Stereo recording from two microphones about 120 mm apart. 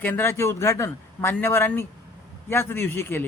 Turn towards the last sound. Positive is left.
turn(degrees=20)  # may be behind; listen again after turning